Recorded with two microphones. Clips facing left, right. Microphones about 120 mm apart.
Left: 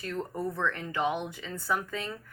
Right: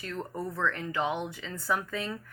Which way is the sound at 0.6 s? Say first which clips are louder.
Right 1 dB; 20° left (ahead or behind).